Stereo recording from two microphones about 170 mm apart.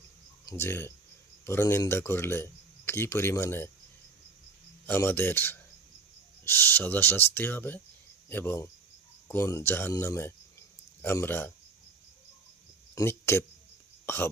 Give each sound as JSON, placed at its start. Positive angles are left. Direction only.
{"t": 0.4, "sound": "speech", "side_deg": 15}
{"t": 4.9, "sound": "speech", "side_deg": 10}
{"t": 13.0, "sound": "speech", "side_deg": 15}